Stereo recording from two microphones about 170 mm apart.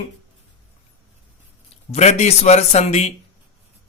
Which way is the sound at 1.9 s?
40° left (ahead or behind).